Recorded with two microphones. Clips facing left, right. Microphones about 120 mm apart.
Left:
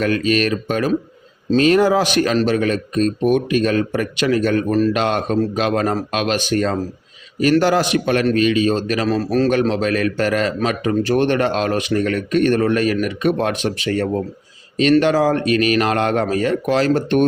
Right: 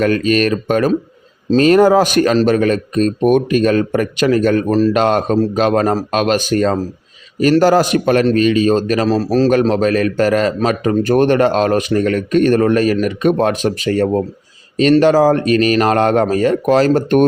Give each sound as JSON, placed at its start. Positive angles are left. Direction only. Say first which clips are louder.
{"t": 0.0, "sound": "a man's voice", "louder": "right 4 dB", "side_deg": -45}